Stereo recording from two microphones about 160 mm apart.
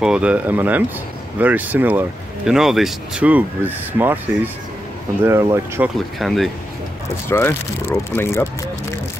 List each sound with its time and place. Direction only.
0.0 s speech: 5° right (ahead or behind)
5.2 s speech: 15° right (ahead or behind)
5.9 s speech: centre (ahead or behind)
7.2 s speech: 15° left (ahead or behind)